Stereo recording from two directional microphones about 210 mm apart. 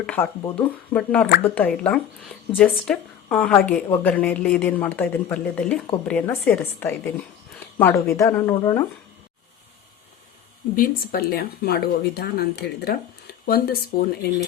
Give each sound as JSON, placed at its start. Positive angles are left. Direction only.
{"t": 0.0, "sound": "speech", "side_deg": 10}
{"t": 10.8, "sound": "speech", "side_deg": 45}